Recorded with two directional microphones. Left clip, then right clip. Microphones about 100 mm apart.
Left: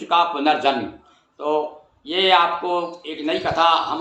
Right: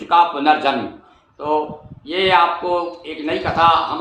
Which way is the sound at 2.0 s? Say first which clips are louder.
Right 2 dB; 20° left (ahead or behind).